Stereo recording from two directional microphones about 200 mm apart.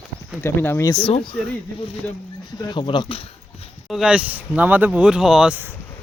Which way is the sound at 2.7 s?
25° left (ahead or behind).